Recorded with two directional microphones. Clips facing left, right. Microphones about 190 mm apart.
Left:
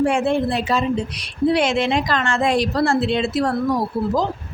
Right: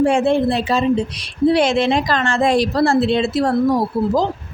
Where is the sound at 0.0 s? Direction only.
25° right (ahead or behind).